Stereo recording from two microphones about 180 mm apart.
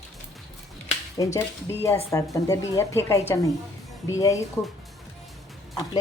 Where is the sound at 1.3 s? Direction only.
15° left (ahead or behind).